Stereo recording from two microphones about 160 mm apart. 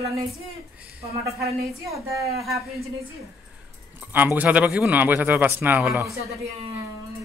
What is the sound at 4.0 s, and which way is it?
A man's voice, 10° right (ahead or behind).